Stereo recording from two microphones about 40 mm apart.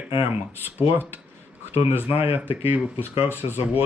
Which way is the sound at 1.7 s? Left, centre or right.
Right.